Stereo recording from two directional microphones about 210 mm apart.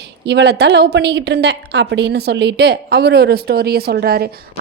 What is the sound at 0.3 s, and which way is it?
A woman's voice, 55° right (ahead or behind).